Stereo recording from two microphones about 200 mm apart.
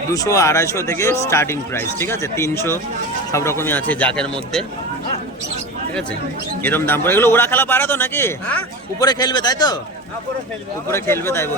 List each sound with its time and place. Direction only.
0.1 s speech: 15° left (ahead or behind)
6.6 s a man's voice: 10° left (ahead or behind)
10.9 s speech: 10° left (ahead or behind)